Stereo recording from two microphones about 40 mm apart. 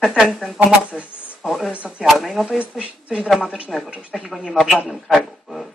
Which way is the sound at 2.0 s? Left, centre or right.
Centre.